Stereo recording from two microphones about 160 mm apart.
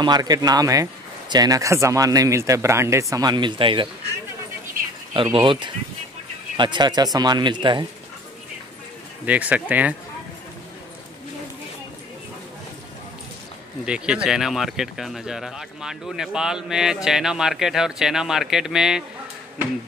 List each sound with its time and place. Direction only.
0.0 s speech: 25° right (ahead or behind)
4.8 s a sound: 60° right (ahead or behind)
5.1 s speech: 30° right (ahead or behind)
9.2 s speech: 10° right (ahead or behind)
13.8 s speech: 5° right (ahead or behind)